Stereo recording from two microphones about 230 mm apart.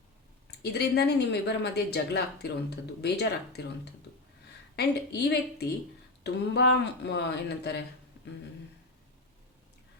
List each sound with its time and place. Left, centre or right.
0.6 s speech: left
4.8 s speech: left